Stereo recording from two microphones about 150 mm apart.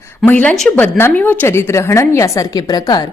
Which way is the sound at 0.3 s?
10° left (ahead or behind).